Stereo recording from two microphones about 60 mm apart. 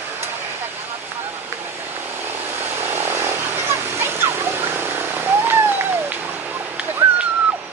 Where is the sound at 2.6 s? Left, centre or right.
Right.